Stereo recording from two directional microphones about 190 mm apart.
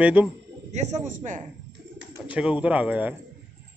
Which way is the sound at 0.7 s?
35° right (ahead or behind).